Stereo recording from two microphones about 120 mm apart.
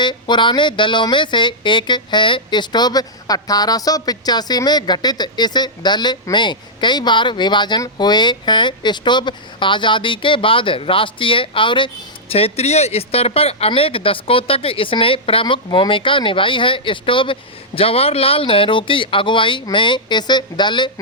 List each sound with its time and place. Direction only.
0.0 s speech: 40° left (ahead or behind)
12.3 s speech: 60° left (ahead or behind); by 20.9 s 40° left (ahead or behind)